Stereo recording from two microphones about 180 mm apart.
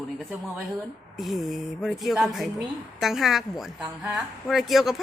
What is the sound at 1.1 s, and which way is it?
Speech, centre (ahead or behind).